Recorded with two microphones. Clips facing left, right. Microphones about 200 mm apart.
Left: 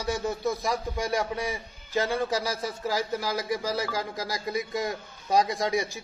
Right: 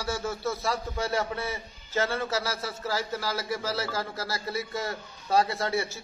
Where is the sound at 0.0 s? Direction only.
15° left (ahead or behind).